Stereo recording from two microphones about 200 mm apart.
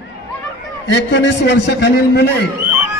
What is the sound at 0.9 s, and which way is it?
Speech, 60° left (ahead or behind).